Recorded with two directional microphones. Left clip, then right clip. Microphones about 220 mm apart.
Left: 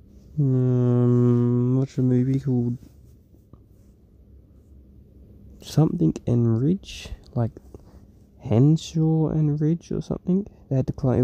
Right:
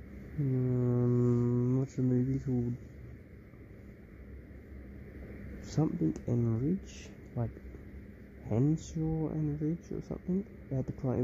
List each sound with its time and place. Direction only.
0.6 s didgeridoo: 45° left (ahead or behind)
5.6 s speech: 40° left (ahead or behind)
8.5 s speech: 45° left (ahead or behind)